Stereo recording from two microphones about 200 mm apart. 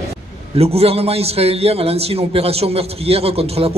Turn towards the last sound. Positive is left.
turn(degrees=-30)  # may be behind; listen again after turning